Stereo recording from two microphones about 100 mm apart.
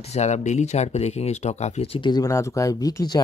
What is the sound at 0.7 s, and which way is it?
Speech, 90° left.